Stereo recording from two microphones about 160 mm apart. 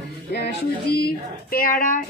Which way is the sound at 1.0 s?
70° left (ahead or behind).